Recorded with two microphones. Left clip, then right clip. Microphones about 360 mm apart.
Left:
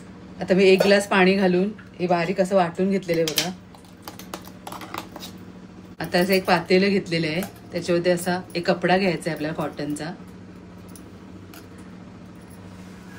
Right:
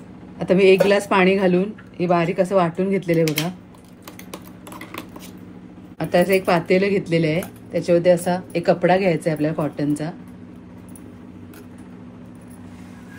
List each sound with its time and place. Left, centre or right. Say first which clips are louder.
0.5 s speech: right 2 dB; centre
5.9 s speech: right 4 dB; centre